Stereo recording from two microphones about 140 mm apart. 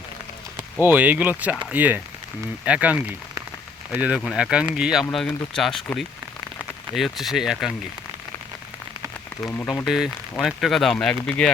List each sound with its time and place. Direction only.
0.8 s speech: 10° right (ahead or behind)
9.4 s speech: 15° left (ahead or behind)
9.8 s speech: 5° right (ahead or behind)